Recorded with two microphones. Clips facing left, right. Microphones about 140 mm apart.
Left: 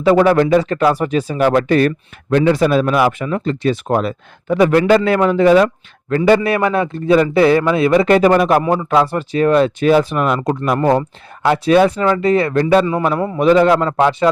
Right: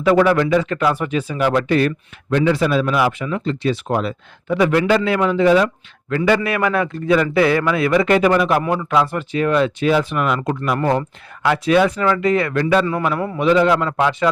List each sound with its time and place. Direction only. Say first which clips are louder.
0.0 s speech: left 3 dB; 30° left (ahead or behind)
8.6 s speech: left 3 dB; 30° left (ahead or behind)
13.4 s speech: left 4 dB; 45° left (ahead or behind)